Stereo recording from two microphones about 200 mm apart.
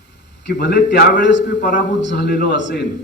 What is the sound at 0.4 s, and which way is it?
A man's voice, 60° left (ahead or behind).